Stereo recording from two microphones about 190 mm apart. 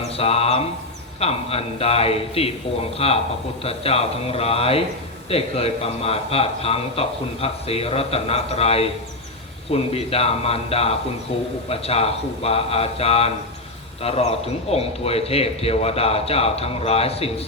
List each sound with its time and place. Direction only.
0.1 s music: 30° left (ahead or behind)
1.2 s a man's voice: 30° left (ahead or behind)